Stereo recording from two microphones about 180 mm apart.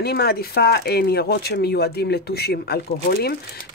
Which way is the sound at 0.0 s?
60° left (ahead or behind).